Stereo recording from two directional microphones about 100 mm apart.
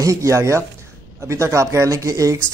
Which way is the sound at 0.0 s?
30° right (ahead or behind).